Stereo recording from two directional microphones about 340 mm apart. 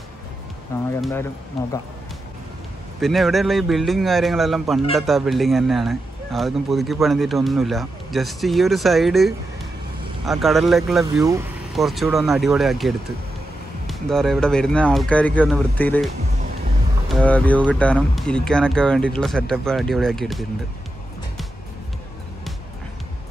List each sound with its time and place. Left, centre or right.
0.7 s speech: centre
3.0 s speech: centre
17.1 s speech: centre